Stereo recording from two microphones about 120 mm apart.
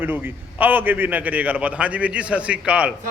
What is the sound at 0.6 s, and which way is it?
A man's voice, 15° right (ahead or behind).